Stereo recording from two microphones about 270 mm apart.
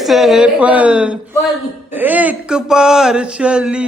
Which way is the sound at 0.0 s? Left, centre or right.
Centre.